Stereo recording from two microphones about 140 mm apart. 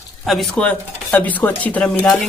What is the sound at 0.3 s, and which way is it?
A man's voice, centre (ahead or behind).